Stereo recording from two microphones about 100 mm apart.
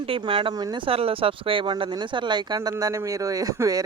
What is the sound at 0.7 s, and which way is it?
Speech, 70° right (ahead or behind).